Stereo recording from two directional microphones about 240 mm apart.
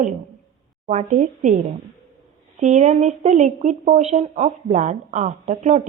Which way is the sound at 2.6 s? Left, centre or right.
Right.